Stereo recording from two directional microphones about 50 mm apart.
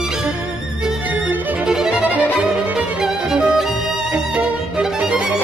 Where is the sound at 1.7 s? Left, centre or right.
Centre.